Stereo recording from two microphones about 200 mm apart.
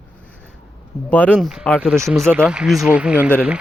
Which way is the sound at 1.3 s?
5° right (ahead or behind).